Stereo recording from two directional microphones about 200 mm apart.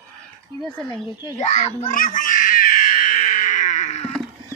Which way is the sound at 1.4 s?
35° left (ahead or behind).